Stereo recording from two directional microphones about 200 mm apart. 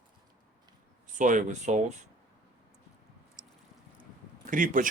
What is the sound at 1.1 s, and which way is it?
Speech, 40° right (ahead or behind).